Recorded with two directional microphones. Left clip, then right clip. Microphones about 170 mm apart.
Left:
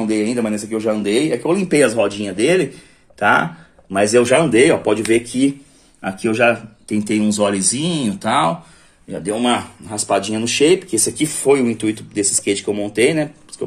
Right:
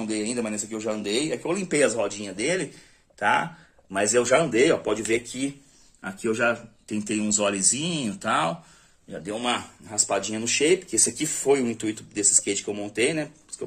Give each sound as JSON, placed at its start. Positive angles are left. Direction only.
{"t": 0.0, "sound": "speech", "side_deg": 15}
{"t": 6.9, "sound": "speech", "side_deg": -10}
{"t": 9.1, "sound": "speech", "side_deg": 10}